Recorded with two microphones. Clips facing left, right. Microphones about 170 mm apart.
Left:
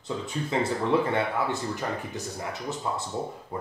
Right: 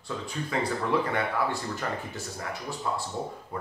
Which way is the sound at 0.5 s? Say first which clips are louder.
Left 3 dB; 25° left (ahead or behind).